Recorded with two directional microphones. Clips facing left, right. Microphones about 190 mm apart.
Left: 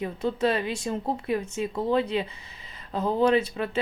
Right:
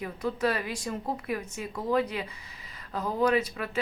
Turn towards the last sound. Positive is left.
turn(degrees=25)  # may be behind; listen again after turning